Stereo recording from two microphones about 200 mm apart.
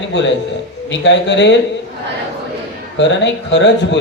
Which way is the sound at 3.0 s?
65° left (ahead or behind).